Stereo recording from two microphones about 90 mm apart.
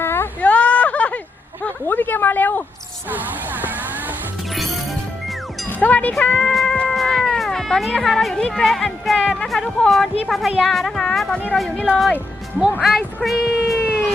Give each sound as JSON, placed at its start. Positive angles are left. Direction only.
{"t": 0.0, "sound": "a sound", "side_deg": 25}
{"t": 1.6, "sound": "a woman's voice", "side_deg": 20}
{"t": 3.1, "sound": "music", "side_deg": -20}
{"t": 4.5, "sound": "music", "side_deg": 0}
{"t": 5.6, "sound": "speech", "side_deg": 20}
{"t": 6.5, "sound": "music", "side_deg": 0}
{"t": 6.7, "sound": "speech", "side_deg": 5}
{"t": 12.8, "sound": "speech", "side_deg": 0}